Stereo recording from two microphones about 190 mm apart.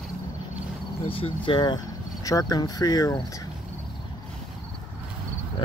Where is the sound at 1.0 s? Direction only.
30° left (ahead or behind).